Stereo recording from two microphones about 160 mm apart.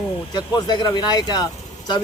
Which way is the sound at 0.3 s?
30° left (ahead or behind).